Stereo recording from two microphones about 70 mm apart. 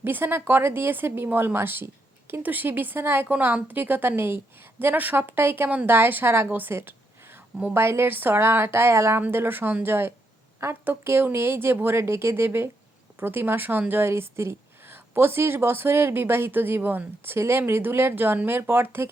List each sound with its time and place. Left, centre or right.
0.0 s a woman's voice: right
6.5 s a sound: right
7.7 s a woman's voice: right